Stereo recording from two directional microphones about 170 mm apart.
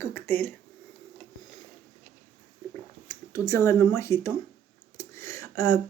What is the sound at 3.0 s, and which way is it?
Speech, 15° left (ahead or behind).